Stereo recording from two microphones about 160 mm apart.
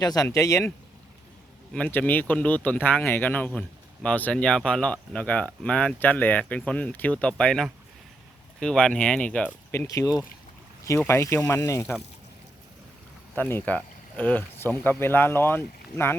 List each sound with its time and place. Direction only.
0.0 s speech: 25° left (ahead or behind)
1.7 s speech: 10° left (ahead or behind)
9.8 s speech: 20° left (ahead or behind)
13.3 s speech: 10° left (ahead or behind)